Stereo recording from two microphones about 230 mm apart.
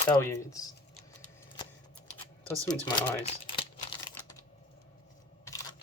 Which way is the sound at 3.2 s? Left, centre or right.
Left.